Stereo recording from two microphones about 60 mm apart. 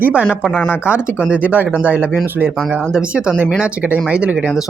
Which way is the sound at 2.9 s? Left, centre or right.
Centre.